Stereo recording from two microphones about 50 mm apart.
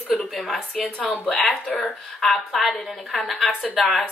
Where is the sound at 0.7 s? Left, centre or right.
Left.